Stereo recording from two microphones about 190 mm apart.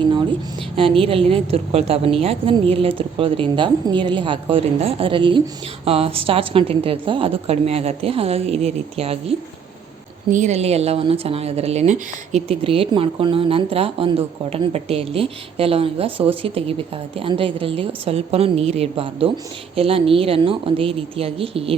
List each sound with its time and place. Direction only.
0.8 s a woman's voice: 30° right (ahead or behind)
10.3 s a woman's voice: 35° right (ahead or behind)